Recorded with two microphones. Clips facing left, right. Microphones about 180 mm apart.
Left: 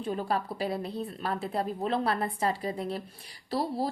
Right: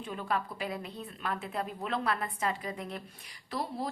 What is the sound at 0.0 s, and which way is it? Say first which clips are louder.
A woman's voice: left 4 dB; 35° left (ahead or behind).